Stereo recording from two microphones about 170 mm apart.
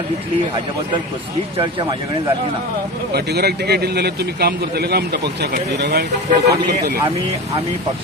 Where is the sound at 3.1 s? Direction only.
70° right (ahead or behind).